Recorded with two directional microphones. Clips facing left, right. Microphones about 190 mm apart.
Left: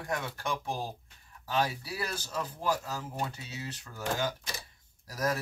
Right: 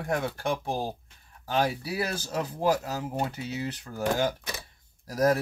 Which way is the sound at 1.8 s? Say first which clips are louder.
Right 6 dB; 65° right (ahead or behind).